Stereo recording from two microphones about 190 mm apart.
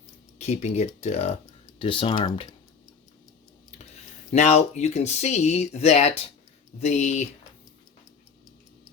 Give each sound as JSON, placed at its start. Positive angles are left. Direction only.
{"t": 0.3, "sound": "speech", "side_deg": 35}
{"t": 4.3, "sound": "speech", "side_deg": 35}